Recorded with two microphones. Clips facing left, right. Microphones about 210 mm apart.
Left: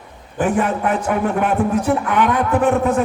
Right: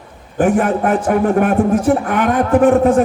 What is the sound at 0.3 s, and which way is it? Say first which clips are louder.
A man's voice: right 4 dB; 45° right (ahead or behind).